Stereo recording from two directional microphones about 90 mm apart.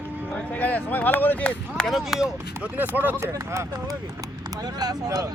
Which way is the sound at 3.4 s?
35° right (ahead or behind).